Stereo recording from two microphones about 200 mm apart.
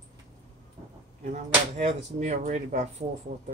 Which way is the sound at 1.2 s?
35° right (ahead or behind).